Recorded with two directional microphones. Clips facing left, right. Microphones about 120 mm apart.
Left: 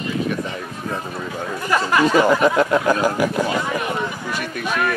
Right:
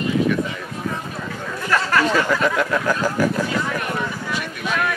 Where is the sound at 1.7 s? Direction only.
15° left (ahead or behind).